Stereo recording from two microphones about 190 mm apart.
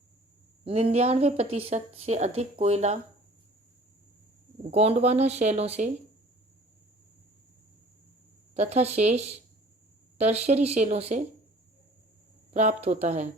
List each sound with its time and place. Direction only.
0.6 s a woman's voice: 30° right (ahead or behind)
4.7 s a woman's voice: 35° right (ahead or behind)
8.5 s a woman's voice: 35° right (ahead or behind)
12.5 s a woman's voice: 35° right (ahead or behind)